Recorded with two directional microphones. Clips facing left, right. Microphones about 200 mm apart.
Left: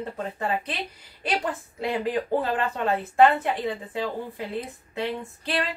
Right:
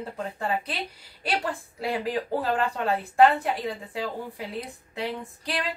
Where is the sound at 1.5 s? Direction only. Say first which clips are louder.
Left 1 dB; 5° right (ahead or behind).